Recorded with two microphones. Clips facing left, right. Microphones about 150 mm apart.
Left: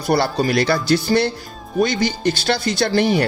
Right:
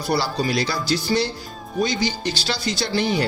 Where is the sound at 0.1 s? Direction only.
55° left (ahead or behind).